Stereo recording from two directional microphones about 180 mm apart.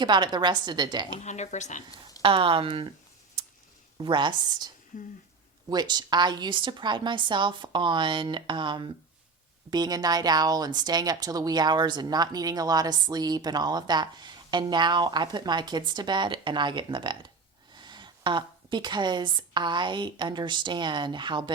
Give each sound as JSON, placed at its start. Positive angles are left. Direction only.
{"t": 0.0, "sound": "a woman's voice", "side_deg": -25}
{"t": 1.2, "sound": "speech", "side_deg": 40}
{"t": 2.2, "sound": "a woman's voice", "side_deg": -30}
{"t": 3.9, "sound": "a woman's voice", "side_deg": -25}